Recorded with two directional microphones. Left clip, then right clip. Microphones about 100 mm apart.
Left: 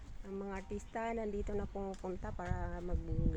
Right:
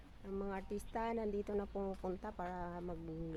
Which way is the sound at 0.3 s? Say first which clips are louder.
Even; 15° right (ahead or behind).